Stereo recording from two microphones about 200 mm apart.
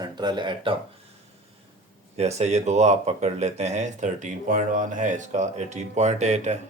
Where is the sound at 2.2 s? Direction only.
35° right (ahead or behind).